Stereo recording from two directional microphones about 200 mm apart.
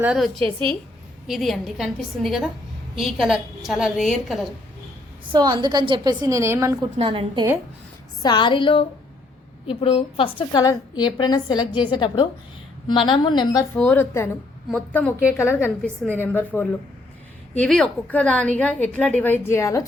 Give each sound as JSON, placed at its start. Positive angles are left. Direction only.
{"t": 0.0, "sound": "a woman's voice", "side_deg": 0}
{"t": 5.3, "sound": "a woman's voice", "side_deg": -20}
{"t": 6.9, "sound": "a woman's voice", "side_deg": -25}
{"t": 8.2, "sound": "a woman's voice", "side_deg": 20}
{"t": 13.7, "sound": "a woman's voice", "side_deg": 10}
{"t": 15.2, "sound": "a woman's voice", "side_deg": -5}
{"t": 16.1, "sound": "a woman's voice", "side_deg": 10}